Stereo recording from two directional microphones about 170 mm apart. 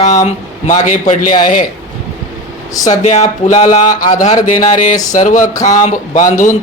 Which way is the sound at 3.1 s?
40° left (ahead or behind).